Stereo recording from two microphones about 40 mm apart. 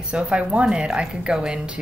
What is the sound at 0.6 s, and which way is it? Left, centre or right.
Speech, centre.